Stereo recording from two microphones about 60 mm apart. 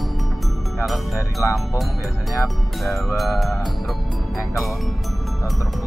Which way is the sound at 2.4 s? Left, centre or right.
Centre.